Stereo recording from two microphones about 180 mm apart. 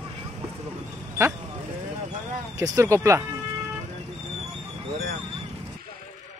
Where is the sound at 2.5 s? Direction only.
15° right (ahead or behind).